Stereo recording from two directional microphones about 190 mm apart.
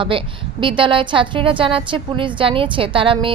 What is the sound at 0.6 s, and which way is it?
A woman's voice, 25° right (ahead or behind).